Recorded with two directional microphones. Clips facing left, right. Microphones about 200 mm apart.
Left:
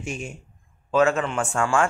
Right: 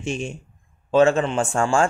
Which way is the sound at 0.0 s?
25° right (ahead or behind).